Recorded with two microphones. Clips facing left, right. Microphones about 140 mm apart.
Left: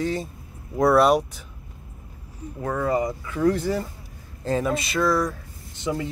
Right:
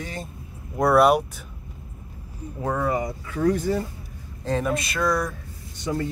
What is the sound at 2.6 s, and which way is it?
Speech, 10° right (ahead or behind).